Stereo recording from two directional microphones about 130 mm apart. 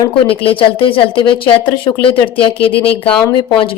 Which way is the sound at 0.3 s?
45° left (ahead or behind).